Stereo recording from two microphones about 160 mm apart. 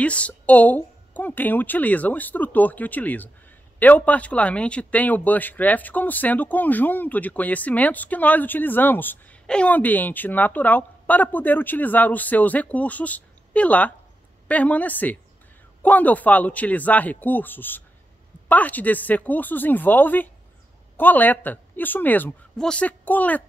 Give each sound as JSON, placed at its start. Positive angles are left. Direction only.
{"t": 0.0, "sound": "speech", "side_deg": 10}